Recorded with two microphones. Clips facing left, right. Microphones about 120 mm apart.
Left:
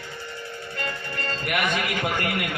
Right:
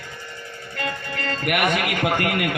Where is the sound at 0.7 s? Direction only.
65° right (ahead or behind).